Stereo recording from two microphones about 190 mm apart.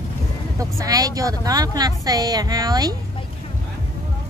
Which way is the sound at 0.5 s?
20° right (ahead or behind).